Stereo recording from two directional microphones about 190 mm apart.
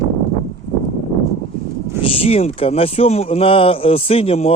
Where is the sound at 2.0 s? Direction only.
30° left (ahead or behind).